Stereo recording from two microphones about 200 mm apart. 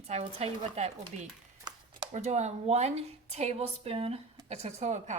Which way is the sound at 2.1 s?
35° right (ahead or behind).